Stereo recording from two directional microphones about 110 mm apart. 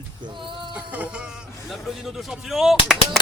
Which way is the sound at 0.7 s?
15° right (ahead or behind).